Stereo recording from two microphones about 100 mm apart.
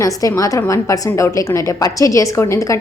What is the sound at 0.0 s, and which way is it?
A woman's voice, 35° left (ahead or behind).